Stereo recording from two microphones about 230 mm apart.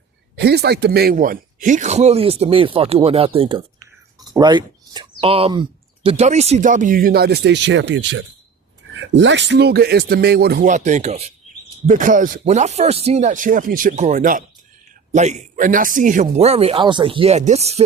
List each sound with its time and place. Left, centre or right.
0.3 s speech: right